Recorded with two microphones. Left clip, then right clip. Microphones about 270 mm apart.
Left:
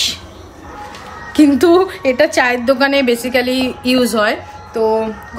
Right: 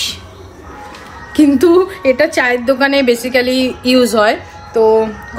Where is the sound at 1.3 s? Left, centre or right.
Centre.